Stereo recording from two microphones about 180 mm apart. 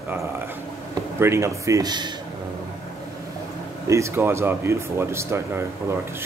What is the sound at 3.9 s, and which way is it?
Speech, 15° right (ahead or behind).